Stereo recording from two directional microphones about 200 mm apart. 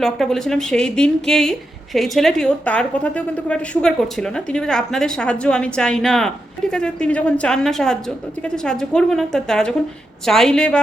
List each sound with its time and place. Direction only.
0.0 s a woman's voice: centre (ahead or behind)